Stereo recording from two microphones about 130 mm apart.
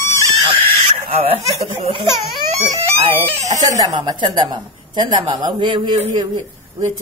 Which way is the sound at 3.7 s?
30° right (ahead or behind).